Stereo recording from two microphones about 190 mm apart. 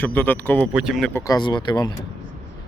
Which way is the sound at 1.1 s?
15° left (ahead or behind).